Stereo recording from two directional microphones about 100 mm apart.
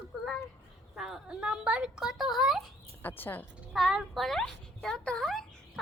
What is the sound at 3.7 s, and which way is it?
Speech, centre (ahead or behind).